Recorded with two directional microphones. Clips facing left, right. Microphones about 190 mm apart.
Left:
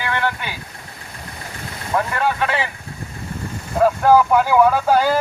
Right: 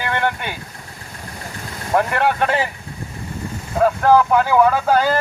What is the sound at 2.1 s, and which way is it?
Speech, 65° right (ahead or behind).